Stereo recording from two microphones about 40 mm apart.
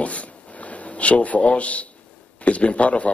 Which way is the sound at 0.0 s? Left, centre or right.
Left.